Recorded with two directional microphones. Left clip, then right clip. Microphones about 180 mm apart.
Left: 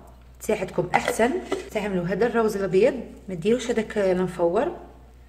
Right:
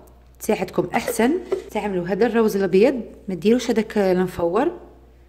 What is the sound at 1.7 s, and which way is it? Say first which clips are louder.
A woman's voice: right 2 dB; 40° right (ahead or behind).